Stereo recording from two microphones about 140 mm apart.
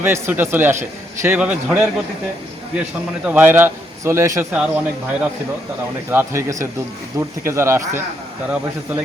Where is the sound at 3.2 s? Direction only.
15° right (ahead or behind).